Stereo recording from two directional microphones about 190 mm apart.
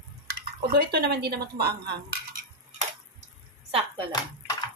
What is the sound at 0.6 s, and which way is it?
Speech, 60° right (ahead or behind).